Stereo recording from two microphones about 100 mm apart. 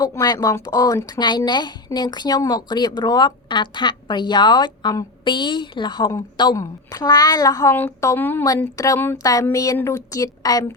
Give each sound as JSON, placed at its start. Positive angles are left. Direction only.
{"t": 0.0, "sound": "speech", "side_deg": 40}
{"t": 7.7, "sound": "speech", "side_deg": 20}
{"t": 8.7, "sound": "speech", "side_deg": 35}